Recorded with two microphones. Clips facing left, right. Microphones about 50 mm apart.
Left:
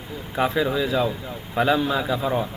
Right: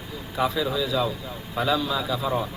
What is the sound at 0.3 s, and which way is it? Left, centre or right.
A man's voice, left.